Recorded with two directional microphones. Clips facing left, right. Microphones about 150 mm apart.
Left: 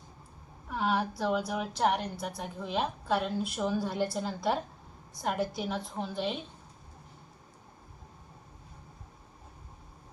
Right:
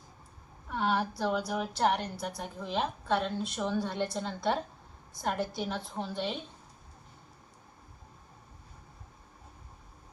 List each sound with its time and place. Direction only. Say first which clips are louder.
0.7 s a woman's voice: even; centre (ahead or behind)